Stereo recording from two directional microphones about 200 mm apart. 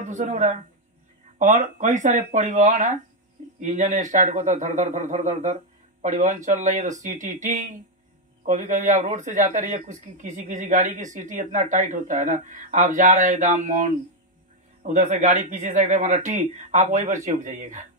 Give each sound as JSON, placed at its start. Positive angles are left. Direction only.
{"t": 0.0, "sound": "a woman's voice", "side_deg": -35}